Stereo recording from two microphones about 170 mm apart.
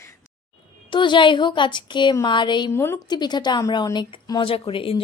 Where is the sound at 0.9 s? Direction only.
30° left (ahead or behind).